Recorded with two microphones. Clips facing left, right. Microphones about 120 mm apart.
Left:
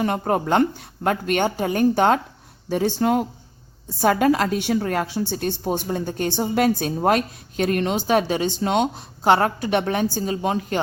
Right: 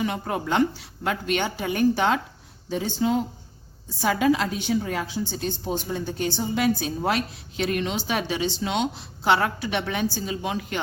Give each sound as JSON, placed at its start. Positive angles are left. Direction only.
{"t": 0.0, "sound": "a woman's voice", "side_deg": 45}
{"t": 2.6, "sound": "speech", "side_deg": 60}
{"t": 4.0, "sound": "a woman's voice", "side_deg": 50}